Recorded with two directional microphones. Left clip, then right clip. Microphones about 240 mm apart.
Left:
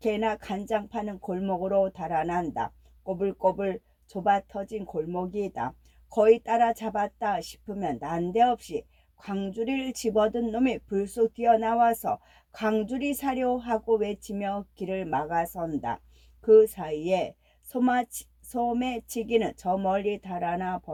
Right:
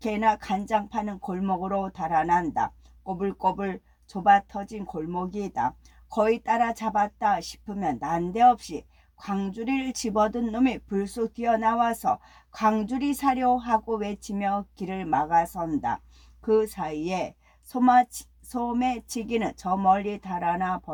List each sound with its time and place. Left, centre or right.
0.0 s a woman's voice: centre